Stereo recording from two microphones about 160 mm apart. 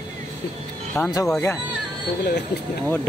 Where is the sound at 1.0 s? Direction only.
10° left (ahead or behind).